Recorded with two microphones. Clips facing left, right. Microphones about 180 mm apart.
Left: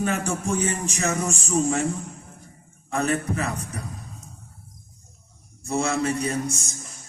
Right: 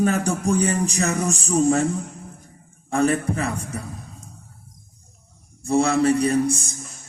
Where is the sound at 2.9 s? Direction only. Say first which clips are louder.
Right 4 dB; 30° right (ahead or behind).